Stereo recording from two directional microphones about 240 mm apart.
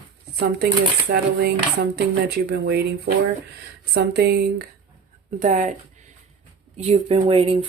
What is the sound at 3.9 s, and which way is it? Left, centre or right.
Speech, right.